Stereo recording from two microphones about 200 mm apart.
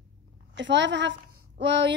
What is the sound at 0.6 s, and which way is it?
A woman's voice, 65° right (ahead or behind).